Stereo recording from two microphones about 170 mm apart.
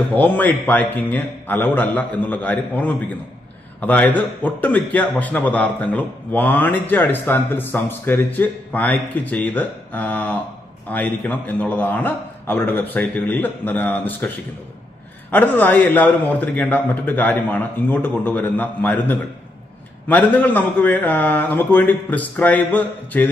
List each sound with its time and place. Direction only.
0.1 s a man's voice: 10° left (ahead or behind)